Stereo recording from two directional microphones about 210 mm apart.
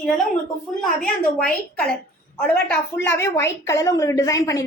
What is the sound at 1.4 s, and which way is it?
A woman's voice, 5° left (ahead or behind).